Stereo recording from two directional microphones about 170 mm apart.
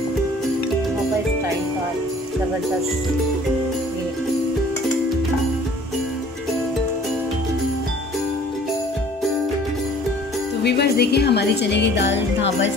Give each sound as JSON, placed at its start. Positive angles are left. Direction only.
{"t": 10.6, "sound": "speech", "side_deg": 75}